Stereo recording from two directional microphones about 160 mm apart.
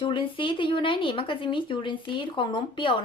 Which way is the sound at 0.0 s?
30° left (ahead or behind).